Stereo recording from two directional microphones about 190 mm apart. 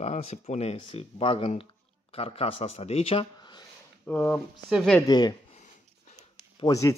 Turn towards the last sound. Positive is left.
turn(degrees=15)  # may be behind; listen again after turning